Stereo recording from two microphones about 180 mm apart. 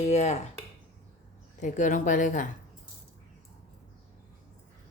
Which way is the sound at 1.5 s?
40° left (ahead or behind).